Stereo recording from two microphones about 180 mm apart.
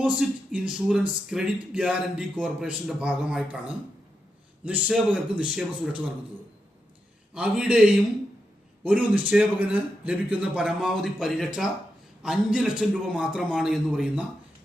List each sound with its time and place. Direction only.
0.0 s a man's voice: 5° right (ahead or behind)
4.6 s a man's voice: 5° right (ahead or behind)
7.3 s a man's voice: 5° right (ahead or behind)